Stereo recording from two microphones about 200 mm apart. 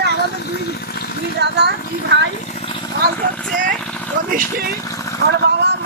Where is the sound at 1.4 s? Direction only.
55° right (ahead or behind).